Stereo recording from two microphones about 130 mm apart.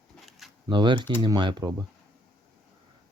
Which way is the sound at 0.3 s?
Centre (ahead or behind).